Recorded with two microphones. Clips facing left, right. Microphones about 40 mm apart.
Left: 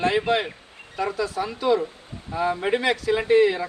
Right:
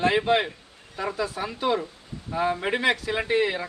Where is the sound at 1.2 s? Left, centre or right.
Right.